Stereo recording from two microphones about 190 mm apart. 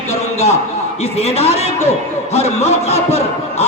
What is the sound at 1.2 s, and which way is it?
Speech, 35° left (ahead or behind).